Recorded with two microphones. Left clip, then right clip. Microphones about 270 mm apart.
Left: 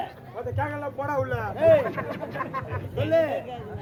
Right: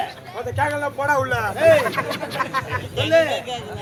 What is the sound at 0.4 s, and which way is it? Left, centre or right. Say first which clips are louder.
Speech: right 8 dB; centre.